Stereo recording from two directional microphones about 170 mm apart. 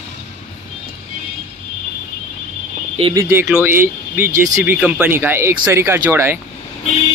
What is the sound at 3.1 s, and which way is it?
Speech, 15° right (ahead or behind).